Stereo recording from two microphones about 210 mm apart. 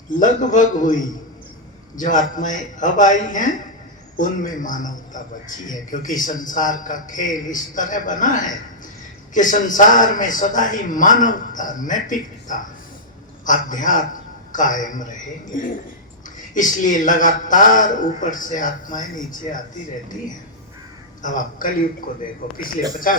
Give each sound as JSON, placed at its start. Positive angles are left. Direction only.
{"t": 0.2, "sound": "a man's voice", "side_deg": 40}
{"t": 2.0, "sound": "a man's voice", "side_deg": 40}
{"t": 16.4, "sound": "a man's voice", "side_deg": 40}
{"t": 21.2, "sound": "a man's voice", "side_deg": 40}